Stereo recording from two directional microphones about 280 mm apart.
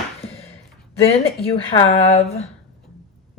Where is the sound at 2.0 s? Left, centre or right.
Left.